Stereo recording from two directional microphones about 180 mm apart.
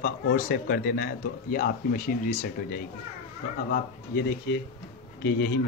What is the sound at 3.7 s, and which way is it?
Speech, 65° left (ahead or behind).